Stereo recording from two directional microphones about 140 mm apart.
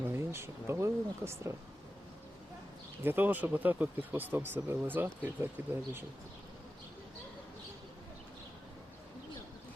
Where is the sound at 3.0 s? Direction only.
15° right (ahead or behind).